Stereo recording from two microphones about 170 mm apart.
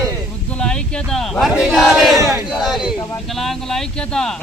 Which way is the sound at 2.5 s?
Centre (ahead or behind).